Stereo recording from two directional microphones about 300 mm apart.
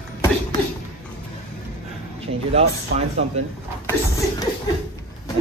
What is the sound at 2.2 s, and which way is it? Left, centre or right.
Speech, right.